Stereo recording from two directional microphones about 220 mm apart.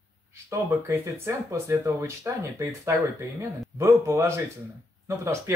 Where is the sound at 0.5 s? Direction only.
10° right (ahead or behind).